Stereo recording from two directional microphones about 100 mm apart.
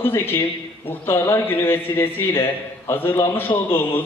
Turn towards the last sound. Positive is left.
turn(degrees=20)  # may be behind; listen again after turning